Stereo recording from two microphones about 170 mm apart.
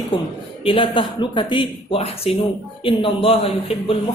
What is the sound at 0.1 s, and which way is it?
A man's voice, 30° left (ahead or behind).